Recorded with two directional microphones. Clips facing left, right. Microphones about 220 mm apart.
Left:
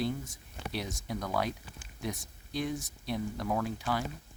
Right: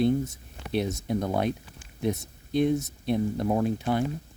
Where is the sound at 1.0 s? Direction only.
25° right (ahead or behind).